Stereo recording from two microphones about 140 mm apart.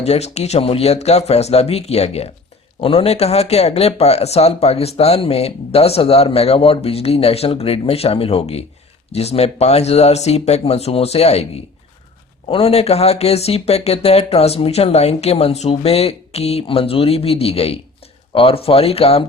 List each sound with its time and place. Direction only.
0.0 s speech: 50° left (ahead or behind)